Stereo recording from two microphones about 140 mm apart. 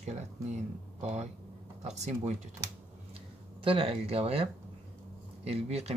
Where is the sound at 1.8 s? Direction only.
55° right (ahead or behind).